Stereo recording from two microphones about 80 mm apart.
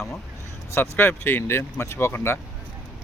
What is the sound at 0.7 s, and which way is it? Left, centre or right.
Speech, left.